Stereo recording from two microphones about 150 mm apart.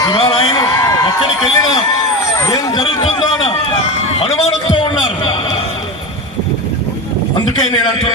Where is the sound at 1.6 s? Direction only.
30° left (ahead or behind).